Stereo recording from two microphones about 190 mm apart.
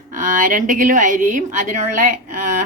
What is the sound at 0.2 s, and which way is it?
A woman's voice, 45° right (ahead or behind).